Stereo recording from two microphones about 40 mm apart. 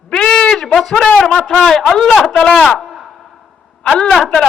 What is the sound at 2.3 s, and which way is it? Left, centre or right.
Speech, centre.